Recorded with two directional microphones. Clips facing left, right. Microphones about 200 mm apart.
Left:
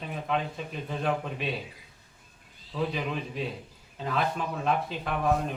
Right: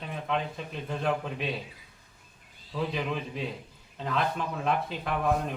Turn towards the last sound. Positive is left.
turn(degrees=0)  # may be behind; listen again after turning